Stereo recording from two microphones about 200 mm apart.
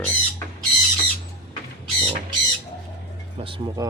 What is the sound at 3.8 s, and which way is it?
Speech, 20° right (ahead or behind).